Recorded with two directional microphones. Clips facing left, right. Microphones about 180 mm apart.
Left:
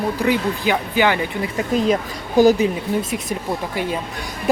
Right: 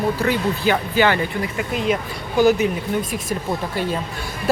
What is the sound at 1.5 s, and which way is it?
Speech, 35° left (ahead or behind).